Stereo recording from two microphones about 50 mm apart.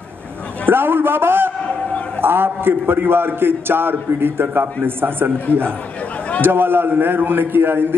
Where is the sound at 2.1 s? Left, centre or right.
Right.